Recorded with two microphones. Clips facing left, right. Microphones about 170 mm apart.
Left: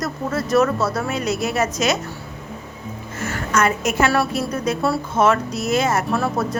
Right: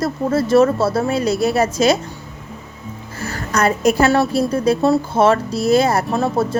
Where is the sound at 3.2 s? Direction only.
35° right (ahead or behind).